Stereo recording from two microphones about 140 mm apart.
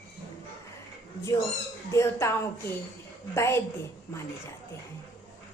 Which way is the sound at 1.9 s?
20° left (ahead or behind).